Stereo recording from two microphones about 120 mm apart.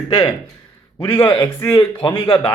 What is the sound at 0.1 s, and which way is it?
Speech, 50° left (ahead or behind).